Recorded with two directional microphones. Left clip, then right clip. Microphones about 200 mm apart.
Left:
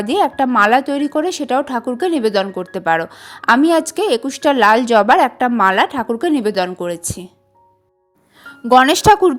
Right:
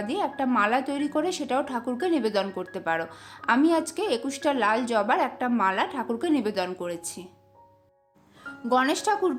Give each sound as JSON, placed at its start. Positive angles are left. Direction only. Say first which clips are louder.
{"t": 0.0, "sound": "a woman's voice", "louder": "left 12 dB", "side_deg": 40}
{"t": 8.4, "sound": "speech", "louder": "left 13 dB", "side_deg": 40}